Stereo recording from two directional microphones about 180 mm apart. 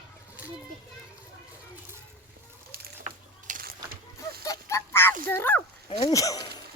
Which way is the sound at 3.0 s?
45° right (ahead or behind).